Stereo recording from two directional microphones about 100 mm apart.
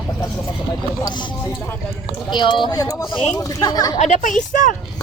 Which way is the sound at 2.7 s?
35° left (ahead or behind).